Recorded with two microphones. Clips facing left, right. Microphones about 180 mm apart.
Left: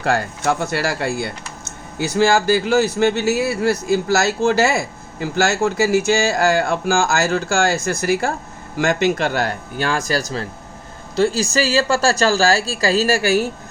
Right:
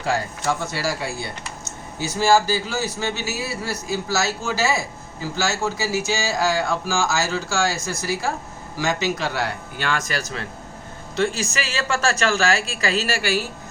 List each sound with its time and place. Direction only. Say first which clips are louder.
0.0 s speech: left 4 dB; 65° left (ahead or behind)
9.7 s speech: left 6 dB; 35° left (ahead or behind)